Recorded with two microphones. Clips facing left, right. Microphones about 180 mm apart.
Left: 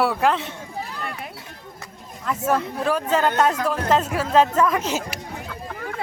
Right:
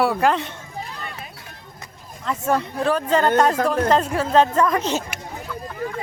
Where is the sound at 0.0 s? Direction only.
Centre (ahead or behind).